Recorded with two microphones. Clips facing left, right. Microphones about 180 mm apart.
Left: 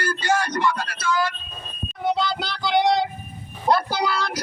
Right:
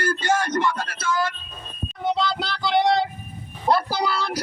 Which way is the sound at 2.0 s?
Centre (ahead or behind).